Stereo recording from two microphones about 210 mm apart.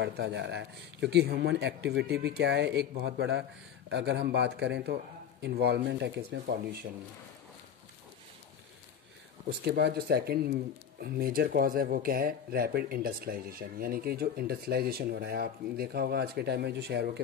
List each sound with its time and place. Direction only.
0.0 s a man's voice: 55° right (ahead or behind)
9.7 s speech: 50° right (ahead or behind)